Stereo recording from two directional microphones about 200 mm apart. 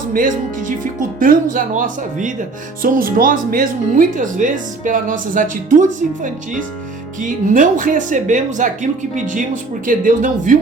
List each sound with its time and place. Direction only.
0.1 s speech: 45° right (ahead or behind)